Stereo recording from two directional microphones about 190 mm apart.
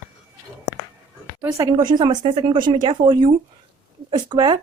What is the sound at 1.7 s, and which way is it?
Speech, 25° right (ahead or behind).